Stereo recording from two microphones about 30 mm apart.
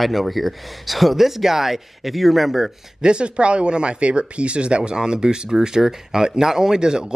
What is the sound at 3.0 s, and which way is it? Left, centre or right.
Speech, right.